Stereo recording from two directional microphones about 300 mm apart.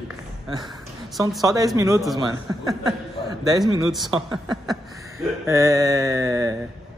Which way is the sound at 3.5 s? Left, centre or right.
Centre.